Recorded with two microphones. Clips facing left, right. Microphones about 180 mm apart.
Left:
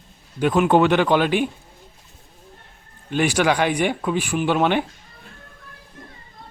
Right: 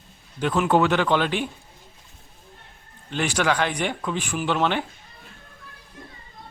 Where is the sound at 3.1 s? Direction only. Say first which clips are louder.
Left 4 dB; 10° left (ahead or behind).